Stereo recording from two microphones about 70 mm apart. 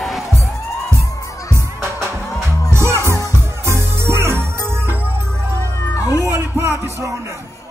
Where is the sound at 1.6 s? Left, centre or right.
Right.